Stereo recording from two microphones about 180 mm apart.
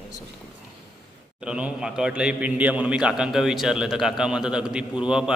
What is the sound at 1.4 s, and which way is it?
A man's voice, 5° right (ahead or behind).